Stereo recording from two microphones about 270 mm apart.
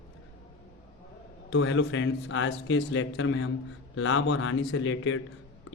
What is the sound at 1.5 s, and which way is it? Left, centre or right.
A man's voice, left.